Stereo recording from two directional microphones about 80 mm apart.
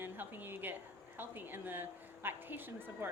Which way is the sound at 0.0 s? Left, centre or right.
Right.